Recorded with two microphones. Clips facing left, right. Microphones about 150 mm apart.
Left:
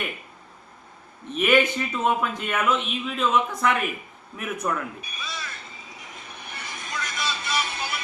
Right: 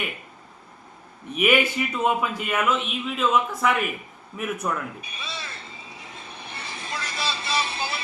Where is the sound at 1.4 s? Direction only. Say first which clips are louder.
Left 1 dB; 10° right (ahead or behind).